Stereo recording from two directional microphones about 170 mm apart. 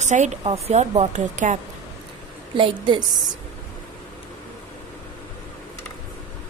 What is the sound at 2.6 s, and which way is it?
Speech, 30° right (ahead or behind).